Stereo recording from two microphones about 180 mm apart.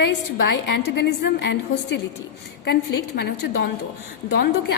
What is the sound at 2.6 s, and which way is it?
Speech, 65° left (ahead or behind).